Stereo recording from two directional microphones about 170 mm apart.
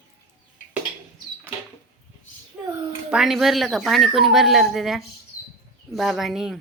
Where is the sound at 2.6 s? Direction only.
10° right (ahead or behind).